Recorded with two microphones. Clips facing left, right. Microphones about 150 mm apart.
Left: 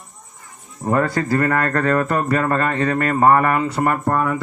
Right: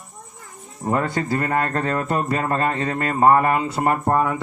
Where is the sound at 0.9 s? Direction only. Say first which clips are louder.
Left 4 dB; 20° right (ahead or behind).